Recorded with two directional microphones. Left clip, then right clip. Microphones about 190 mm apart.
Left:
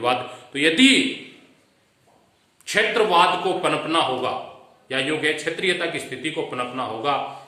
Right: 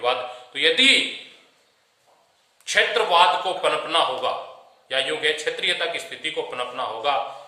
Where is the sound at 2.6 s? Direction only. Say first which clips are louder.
Even; 15° right (ahead or behind).